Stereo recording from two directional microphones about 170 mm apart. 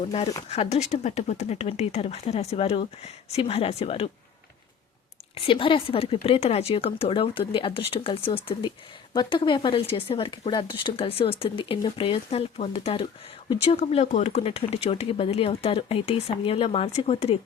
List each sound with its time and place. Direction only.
0.1 s speech: 35° left (ahead or behind)
5.3 s speech: 30° left (ahead or behind)